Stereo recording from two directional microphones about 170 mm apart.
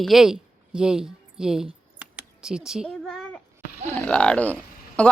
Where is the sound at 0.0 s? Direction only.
Centre (ahead or behind).